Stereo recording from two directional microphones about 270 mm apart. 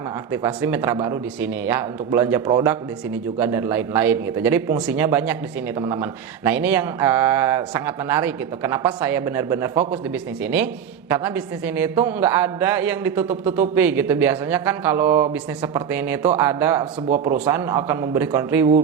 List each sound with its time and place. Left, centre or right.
0.3 s a man's voice: centre